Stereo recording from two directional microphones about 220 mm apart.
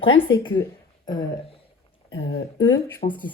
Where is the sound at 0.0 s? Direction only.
20° left (ahead or behind).